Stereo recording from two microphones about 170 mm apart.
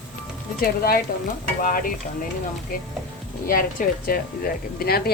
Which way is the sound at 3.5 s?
55° left (ahead or behind).